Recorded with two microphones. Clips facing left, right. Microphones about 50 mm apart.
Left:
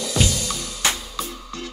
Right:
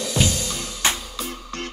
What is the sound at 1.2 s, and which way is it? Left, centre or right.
Music, right.